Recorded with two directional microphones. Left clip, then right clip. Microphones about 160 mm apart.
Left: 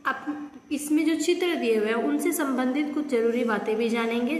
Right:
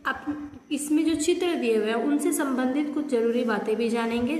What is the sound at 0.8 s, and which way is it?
A woman's voice, 20° right (ahead or behind).